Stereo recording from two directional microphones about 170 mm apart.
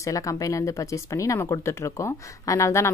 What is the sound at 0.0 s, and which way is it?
Speech, 20° left (ahead or behind).